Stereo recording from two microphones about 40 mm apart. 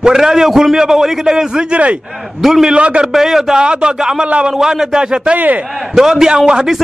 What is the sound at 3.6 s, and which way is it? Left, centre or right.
Speech, right.